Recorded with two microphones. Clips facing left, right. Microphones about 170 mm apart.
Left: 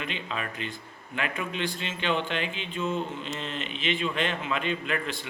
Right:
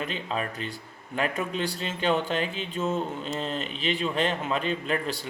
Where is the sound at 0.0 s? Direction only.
40° right (ahead or behind).